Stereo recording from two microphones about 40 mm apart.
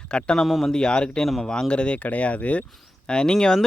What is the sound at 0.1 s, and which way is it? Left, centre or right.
Speech, left.